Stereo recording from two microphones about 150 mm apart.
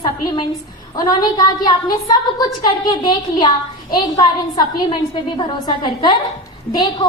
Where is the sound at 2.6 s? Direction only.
30° left (ahead or behind).